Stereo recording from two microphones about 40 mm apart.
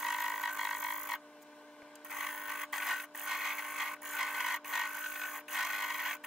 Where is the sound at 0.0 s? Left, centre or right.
Centre.